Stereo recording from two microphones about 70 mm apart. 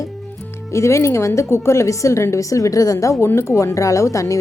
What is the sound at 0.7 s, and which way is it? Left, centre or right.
Speech, left.